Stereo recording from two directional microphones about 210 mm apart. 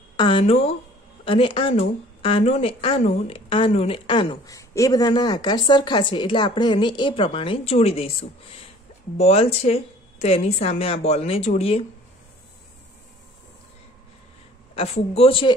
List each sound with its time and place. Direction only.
0.2 s speech: 25° left (ahead or behind)
14.8 s speech: 25° left (ahead or behind)